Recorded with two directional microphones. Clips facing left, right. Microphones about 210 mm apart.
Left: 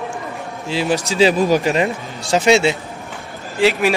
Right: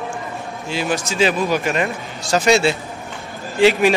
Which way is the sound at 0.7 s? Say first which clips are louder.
Left 3 dB; 30° left (ahead or behind).